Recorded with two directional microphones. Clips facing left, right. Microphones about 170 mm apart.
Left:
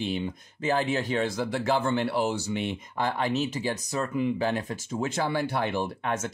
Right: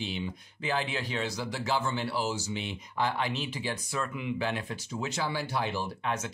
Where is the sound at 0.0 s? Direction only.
50° left (ahead or behind).